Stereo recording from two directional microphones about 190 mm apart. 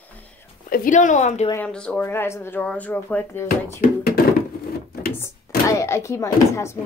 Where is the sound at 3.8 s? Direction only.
50° left (ahead or behind).